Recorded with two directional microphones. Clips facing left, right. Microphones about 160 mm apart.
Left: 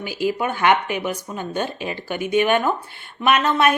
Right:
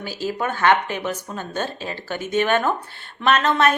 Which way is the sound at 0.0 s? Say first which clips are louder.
Left 3 dB; 15° left (ahead or behind).